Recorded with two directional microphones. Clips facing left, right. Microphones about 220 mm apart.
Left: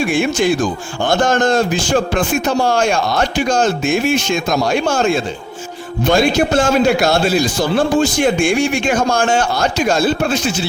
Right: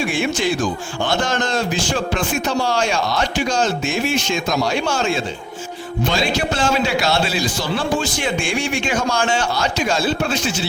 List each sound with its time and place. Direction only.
0.0 s a man's voice: 50° left (ahead or behind)